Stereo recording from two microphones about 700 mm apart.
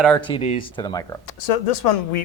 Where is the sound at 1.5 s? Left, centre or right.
Left.